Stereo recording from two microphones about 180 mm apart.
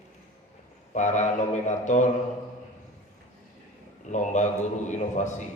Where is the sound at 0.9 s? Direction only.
40° left (ahead or behind).